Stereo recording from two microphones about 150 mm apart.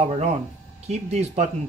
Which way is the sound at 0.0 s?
45° right (ahead or behind).